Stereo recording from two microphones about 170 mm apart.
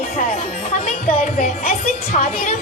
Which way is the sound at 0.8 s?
45° left (ahead or behind).